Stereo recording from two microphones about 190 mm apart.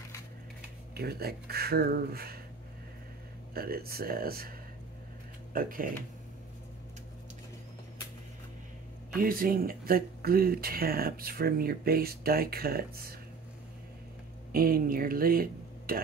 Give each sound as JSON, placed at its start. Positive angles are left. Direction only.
{"t": 0.9, "sound": "speech", "side_deg": -55}
{"t": 3.5, "sound": "speech", "side_deg": -55}
{"t": 9.1, "sound": "speech", "side_deg": -50}
{"t": 14.5, "sound": "speech", "side_deg": -50}